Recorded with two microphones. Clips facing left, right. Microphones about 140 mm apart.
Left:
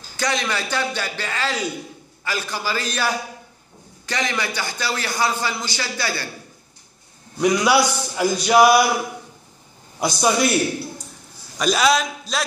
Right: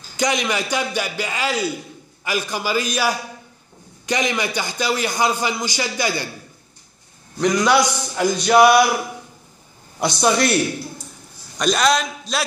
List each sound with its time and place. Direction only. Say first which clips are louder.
0.2 s a man's voice: right 3 dB; 15° right (ahead or behind)
7.3 s a man's voice: even; 10° left (ahead or behind)
9.9 s a woman's voice: right 1 dB; centre (ahead or behind)